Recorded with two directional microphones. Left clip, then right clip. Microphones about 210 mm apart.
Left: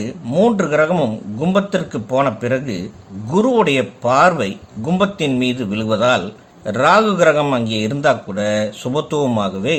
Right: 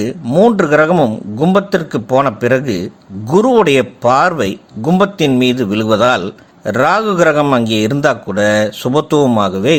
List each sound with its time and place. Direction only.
0.0 s a man's voice: 35° right (ahead or behind)